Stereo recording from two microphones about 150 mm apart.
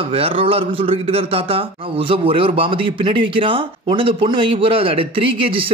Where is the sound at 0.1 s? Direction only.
40° right (ahead or behind).